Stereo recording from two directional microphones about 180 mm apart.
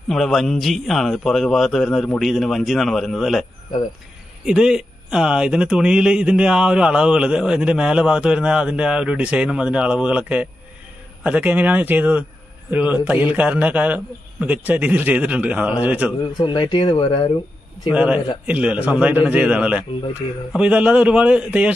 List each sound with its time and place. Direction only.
0.1 s a man's voice: centre (ahead or behind)
4.5 s a man's voice: 5° right (ahead or behind)
16.3 s speech: 25° left (ahead or behind)
17.9 s a man's voice: 5° right (ahead or behind)